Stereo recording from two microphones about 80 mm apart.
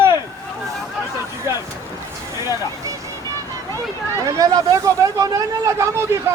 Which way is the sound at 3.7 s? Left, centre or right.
Right.